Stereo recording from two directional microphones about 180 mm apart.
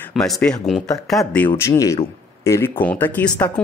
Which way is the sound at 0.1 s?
5° left (ahead or behind).